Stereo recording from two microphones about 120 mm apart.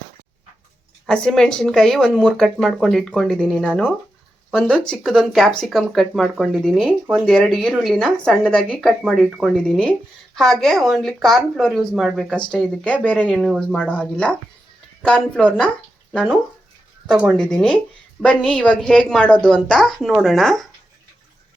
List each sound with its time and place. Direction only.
1.0 s speech: 5° left (ahead or behind)
13.2 s speech: 5° right (ahead or behind)
17.3 s speech: 5° left (ahead or behind)